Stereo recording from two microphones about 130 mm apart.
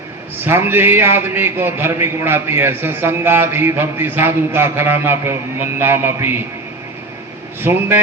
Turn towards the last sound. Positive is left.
turn(degrees=-15)  # may be behind; listen again after turning